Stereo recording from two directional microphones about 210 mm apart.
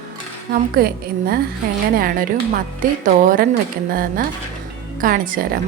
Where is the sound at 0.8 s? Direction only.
45° right (ahead or behind).